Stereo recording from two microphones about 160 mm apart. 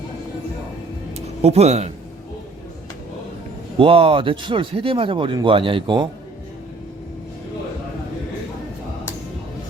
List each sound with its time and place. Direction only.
1.4 s speech: 40° right (ahead or behind)
3.8 s speech: 35° right (ahead or behind)